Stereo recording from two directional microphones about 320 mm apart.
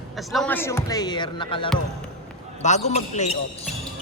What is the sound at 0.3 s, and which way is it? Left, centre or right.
Speech, centre.